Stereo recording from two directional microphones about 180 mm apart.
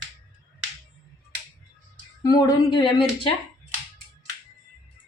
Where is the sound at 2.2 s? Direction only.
20° left (ahead or behind).